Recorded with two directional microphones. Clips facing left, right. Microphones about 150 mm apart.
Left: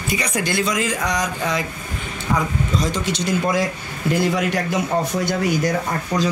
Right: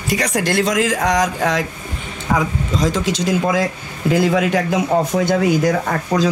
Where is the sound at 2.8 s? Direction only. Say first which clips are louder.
Right 6 dB; 90° right.